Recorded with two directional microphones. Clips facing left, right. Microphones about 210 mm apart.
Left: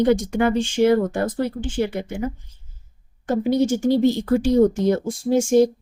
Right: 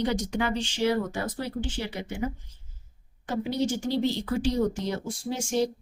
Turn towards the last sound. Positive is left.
turn(degrees=50)  # may be behind; listen again after turning